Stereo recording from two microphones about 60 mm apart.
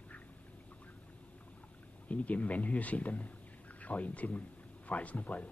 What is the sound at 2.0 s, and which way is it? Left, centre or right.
Speech, left.